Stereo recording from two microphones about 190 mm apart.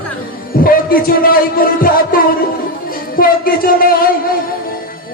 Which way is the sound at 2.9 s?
50° left (ahead or behind).